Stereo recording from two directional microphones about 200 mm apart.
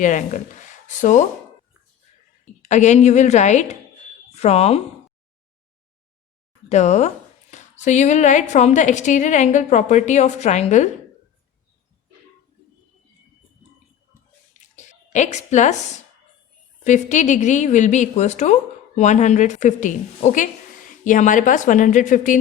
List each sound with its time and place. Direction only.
0.0 s a woman's voice: 40° left (ahead or behind)
2.4 s a woman's voice: 35° left (ahead or behind)
6.7 s a woman's voice: 35° left (ahead or behind)
14.5 s a sound: 35° left (ahead or behind)
16.8 s a woman's voice: 35° left (ahead or behind)